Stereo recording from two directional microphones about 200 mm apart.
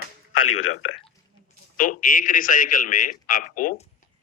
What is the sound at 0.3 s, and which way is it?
Speech, 90° left.